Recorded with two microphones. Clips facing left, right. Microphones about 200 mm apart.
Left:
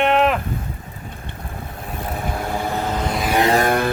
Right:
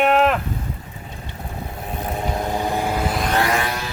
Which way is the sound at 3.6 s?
55° left (ahead or behind).